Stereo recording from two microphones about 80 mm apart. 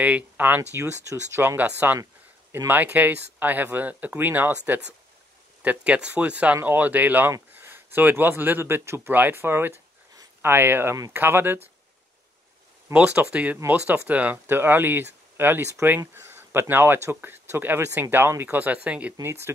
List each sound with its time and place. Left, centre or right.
0.0 s speech: centre
0.6 s speech: right
12.9 s speech: centre